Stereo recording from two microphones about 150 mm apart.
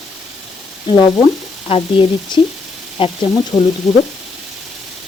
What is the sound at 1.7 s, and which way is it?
Sizzle, 40° left (ahead or behind).